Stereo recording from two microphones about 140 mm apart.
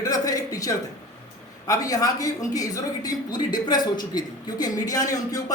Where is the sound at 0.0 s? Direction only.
25° left (ahead or behind).